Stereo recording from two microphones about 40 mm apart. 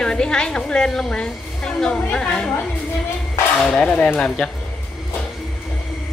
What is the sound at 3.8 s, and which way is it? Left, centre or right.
Speech, left.